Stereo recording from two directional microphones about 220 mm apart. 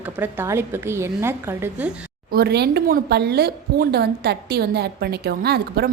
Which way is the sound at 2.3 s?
50° right (ahead or behind).